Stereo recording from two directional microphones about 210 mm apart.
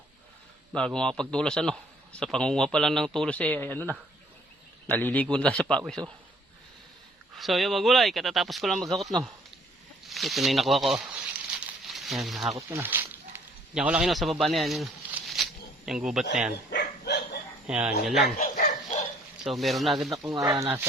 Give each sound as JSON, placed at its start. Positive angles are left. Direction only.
{"t": 0.7, "sound": "speech", "side_deg": 5}
{"t": 7.3, "sound": "speech", "side_deg": 0}
{"t": 10.1, "sound": "a sound", "side_deg": 0}
{"t": 12.5, "sound": "speech", "side_deg": -15}
{"t": 15.9, "sound": "speech", "side_deg": 0}
{"t": 16.7, "sound": "dog", "side_deg": 50}
{"t": 17.7, "sound": "speech", "side_deg": -5}
{"t": 18.3, "sound": "dog", "side_deg": 45}
{"t": 19.4, "sound": "speech", "side_deg": 0}
{"t": 20.1, "sound": "speech", "side_deg": -15}